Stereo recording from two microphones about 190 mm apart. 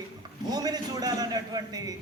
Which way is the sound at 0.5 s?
20° right (ahead or behind).